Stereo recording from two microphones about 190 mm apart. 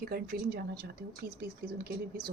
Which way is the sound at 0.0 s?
55° right (ahead or behind).